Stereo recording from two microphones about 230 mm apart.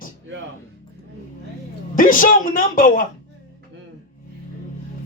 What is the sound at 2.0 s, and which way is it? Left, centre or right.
Speech, left.